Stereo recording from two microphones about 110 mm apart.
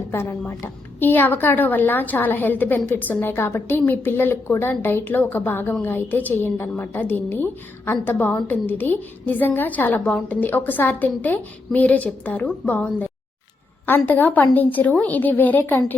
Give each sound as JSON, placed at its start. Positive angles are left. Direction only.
{"t": 0.1, "sound": "a woman's voice", "side_deg": 20}